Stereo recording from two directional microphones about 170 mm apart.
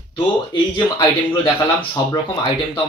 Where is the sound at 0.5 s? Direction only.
25° left (ahead or behind).